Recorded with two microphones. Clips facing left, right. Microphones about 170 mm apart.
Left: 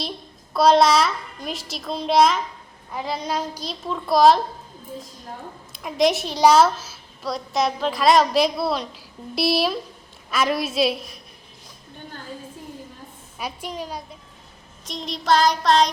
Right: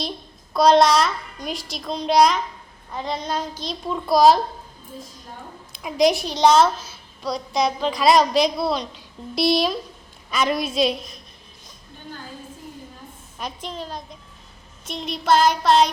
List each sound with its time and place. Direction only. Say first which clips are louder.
0.5 s a woman's voice: right 1 dB; 5° left (ahead or behind)
5.7 s a woman's voice: right 1 dB; centre (ahead or behind)
13.4 s a woman's voice: left 1 dB; 10° left (ahead or behind)
14.8 s a woman's voice: right 1 dB; 5° right (ahead or behind)